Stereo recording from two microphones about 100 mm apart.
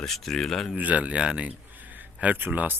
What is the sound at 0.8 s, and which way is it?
Speech, 15° right (ahead or behind).